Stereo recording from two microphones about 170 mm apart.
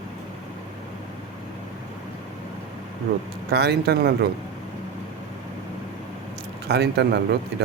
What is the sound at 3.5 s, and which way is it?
Speech, 70° right (ahead or behind).